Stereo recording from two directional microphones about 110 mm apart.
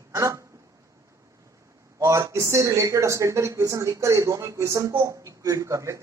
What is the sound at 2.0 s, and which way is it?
Speech, 30° right (ahead or behind).